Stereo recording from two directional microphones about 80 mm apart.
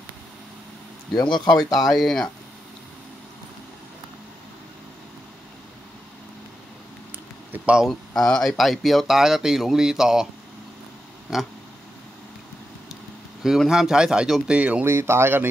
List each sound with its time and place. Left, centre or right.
1.2 s speech: left
1.9 s speech: centre
7.5 s speech: centre
7.8 s speech: centre
13.4 s speech: centre
14.6 s speech: centre
14.9 s speech: right